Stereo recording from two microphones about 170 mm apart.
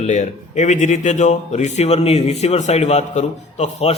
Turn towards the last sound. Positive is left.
turn(degrees=40)  # may be behind; listen again after turning